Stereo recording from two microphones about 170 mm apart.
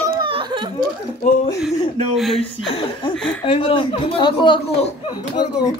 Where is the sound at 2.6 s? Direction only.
30° left (ahead or behind).